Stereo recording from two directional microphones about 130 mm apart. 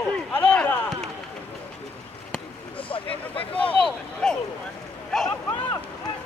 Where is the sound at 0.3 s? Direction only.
10° left (ahead or behind).